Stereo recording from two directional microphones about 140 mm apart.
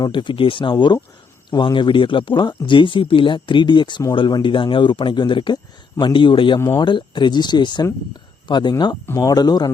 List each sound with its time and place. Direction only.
0.0 s speech: 35° left (ahead or behind)